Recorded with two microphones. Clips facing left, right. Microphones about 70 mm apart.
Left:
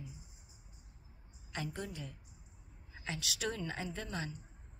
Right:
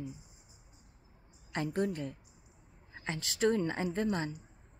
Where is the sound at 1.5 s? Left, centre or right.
Right.